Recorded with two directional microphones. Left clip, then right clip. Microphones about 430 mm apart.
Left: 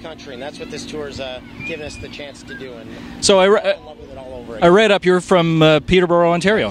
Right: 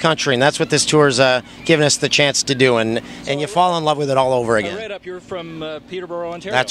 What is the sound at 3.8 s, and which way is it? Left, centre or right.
Speech, right.